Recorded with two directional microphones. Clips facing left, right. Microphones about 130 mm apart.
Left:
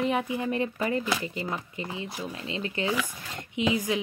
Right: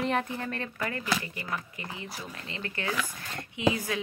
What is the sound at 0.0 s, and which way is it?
A woman's voice, 5° left (ahead or behind).